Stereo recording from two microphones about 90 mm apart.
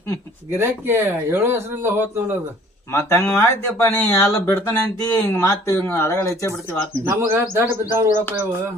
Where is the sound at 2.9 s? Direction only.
30° left (ahead or behind).